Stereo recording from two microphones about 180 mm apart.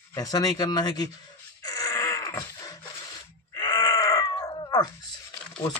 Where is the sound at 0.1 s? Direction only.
20° left (ahead or behind).